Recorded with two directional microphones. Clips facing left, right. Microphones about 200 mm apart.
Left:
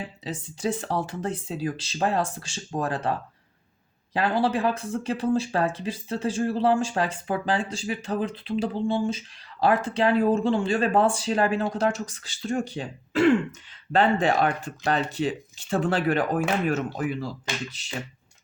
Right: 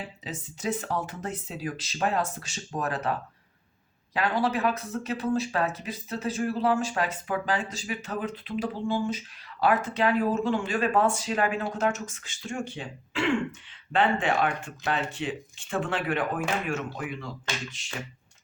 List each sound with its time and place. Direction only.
0.3 s speech: 30° left (ahead or behind)